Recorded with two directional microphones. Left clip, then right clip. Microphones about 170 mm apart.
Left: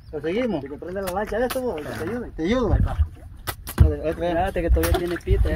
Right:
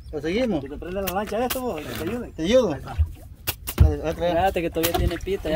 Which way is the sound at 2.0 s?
50° right (ahead or behind).